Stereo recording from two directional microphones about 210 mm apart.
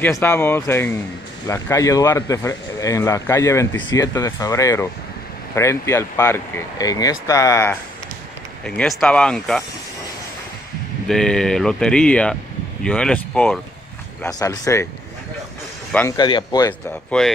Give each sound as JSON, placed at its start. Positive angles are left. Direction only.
{"t": 0.0, "sound": "speech", "side_deg": 10}
{"t": 8.6, "sound": "speech", "side_deg": 5}
{"t": 11.1, "sound": "speech", "side_deg": 0}
{"t": 14.2, "sound": "speech", "side_deg": 15}
{"t": 15.9, "sound": "speech", "side_deg": 5}
{"t": 16.2, "sound": "speech", "side_deg": 20}